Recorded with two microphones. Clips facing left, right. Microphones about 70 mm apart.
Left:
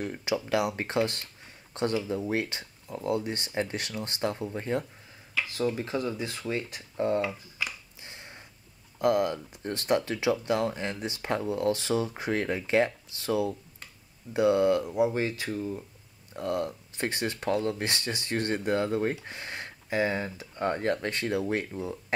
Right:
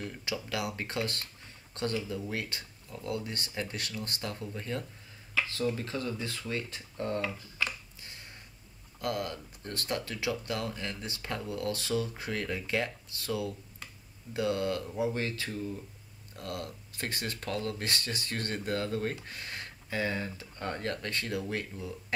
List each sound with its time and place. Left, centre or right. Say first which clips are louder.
0.0 s speech: left 7 dB; left
5.7 s speech: left 4 dB; centre
8.0 s a sound: left 3 dB; left
9.0 s speech: left 9 dB; left